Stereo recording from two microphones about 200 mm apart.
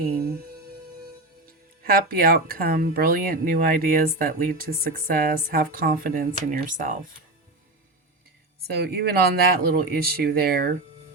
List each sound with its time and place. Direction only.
1.5 s speech: 45° right (ahead or behind)
8.6 s speech: 50° right (ahead or behind)